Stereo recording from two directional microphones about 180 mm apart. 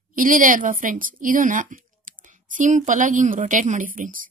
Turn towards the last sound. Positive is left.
turn(degrees=-50)  # may be behind; listen again after turning